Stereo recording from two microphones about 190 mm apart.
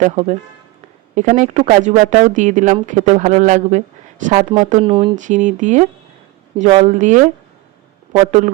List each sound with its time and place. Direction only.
0.0 s a woman's voice: 35° right (ahead or behind)
4.9 s speech: 25° right (ahead or behind)
5.1 s a woman's voice: 40° right (ahead or behind)